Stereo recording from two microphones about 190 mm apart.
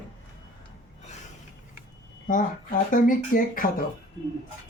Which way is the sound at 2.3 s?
40° left (ahead or behind).